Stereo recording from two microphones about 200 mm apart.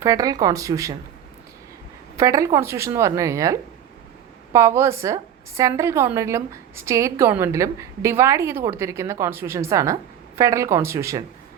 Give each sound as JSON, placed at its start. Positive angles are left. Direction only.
{"t": 0.0, "sound": "a woman's voice", "side_deg": -15}
{"t": 2.1, "sound": "a woman's voice", "side_deg": -15}